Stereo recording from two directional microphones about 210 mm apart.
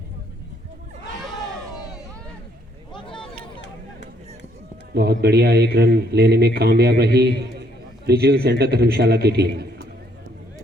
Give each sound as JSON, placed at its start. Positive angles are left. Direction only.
{"t": 1.7, "sound": "hubbub", "side_deg": 20}
{"t": 2.9, "sound": "a sound", "side_deg": 25}
{"t": 4.9, "sound": "a man's voice", "side_deg": -50}